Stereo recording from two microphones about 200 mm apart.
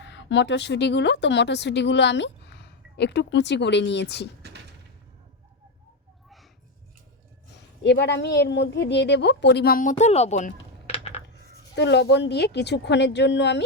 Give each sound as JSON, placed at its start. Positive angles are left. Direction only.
{"t": 0.0, "sound": "speech", "side_deg": 60}
{"t": 7.9, "sound": "a woman's voice", "side_deg": 55}
{"t": 11.7, "sound": "a woman's voice", "side_deg": 60}